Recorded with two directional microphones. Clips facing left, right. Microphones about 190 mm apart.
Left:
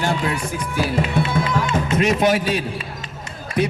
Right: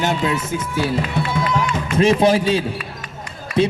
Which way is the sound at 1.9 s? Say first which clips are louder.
Right 4 dB; 30° right (ahead or behind).